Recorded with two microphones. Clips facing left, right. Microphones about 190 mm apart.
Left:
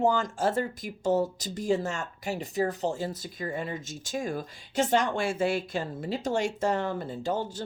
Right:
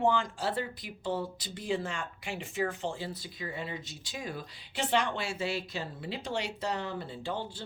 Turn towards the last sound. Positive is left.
turn(degrees=45)  # may be behind; listen again after turning